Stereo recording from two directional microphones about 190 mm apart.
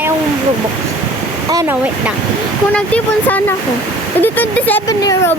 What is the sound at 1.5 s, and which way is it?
Speech, 20° right (ahead or behind).